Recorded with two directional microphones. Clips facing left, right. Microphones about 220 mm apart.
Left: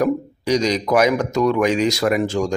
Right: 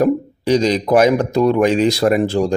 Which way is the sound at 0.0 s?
30° right (ahead or behind).